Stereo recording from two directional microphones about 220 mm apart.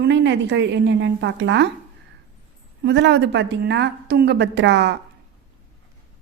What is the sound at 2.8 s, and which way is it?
A woman's voice, 50° right (ahead or behind).